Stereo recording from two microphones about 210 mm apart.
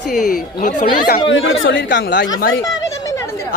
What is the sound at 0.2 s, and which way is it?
Speech, 40° left (ahead or behind).